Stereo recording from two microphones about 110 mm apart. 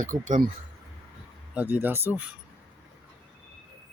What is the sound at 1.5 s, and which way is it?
Speech, 15° right (ahead or behind).